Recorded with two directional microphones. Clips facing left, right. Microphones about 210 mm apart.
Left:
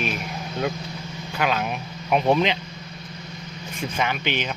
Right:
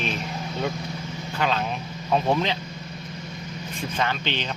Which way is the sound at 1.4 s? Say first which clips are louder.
Left 1 dB; 10° left (ahead or behind).